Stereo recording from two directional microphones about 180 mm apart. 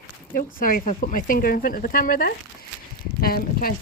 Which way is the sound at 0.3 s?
50° left (ahead or behind).